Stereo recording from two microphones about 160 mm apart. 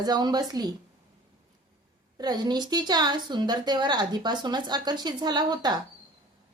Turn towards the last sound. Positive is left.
turn(degrees=-25)  # may be behind; listen again after turning